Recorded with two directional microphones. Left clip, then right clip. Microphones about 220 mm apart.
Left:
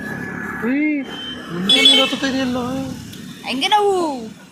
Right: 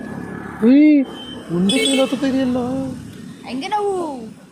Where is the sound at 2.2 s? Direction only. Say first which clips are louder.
Right 1 dB; 35° right (ahead or behind).